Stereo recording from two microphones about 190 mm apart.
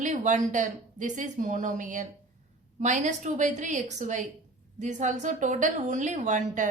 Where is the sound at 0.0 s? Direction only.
40° right (ahead or behind).